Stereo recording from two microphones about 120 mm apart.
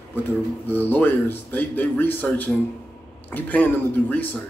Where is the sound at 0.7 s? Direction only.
15° left (ahead or behind).